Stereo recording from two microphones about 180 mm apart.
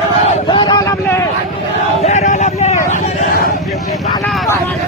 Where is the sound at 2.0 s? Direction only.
40° left (ahead or behind).